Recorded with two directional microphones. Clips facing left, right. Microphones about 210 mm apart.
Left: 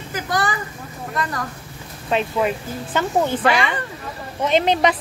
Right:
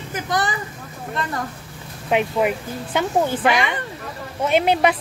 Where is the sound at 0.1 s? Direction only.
20° right (ahead or behind).